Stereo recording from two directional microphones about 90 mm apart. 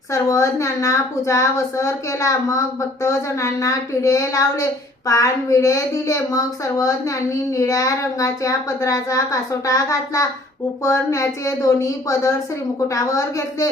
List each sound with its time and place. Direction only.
0.1 s a woman's voice: 40° left (ahead or behind)